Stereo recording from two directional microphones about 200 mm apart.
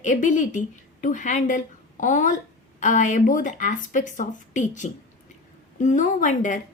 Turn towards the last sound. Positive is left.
turn(degrees=40)  # may be behind; listen again after turning